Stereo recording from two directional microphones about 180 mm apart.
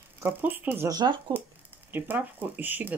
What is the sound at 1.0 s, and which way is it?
Speech, 25° right (ahead or behind).